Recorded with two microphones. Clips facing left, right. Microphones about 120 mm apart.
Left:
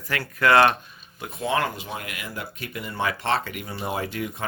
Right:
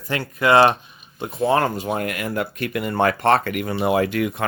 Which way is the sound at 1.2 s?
35° right (ahead or behind).